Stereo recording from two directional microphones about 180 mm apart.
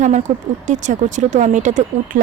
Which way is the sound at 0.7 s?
45° right (ahead or behind).